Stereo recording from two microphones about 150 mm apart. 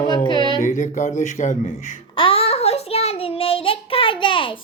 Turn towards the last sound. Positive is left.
turn(degrees=35)  # may be behind; listen again after turning